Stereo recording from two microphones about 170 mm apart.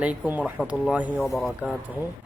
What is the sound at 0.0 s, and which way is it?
Speech, 5° right (ahead or behind).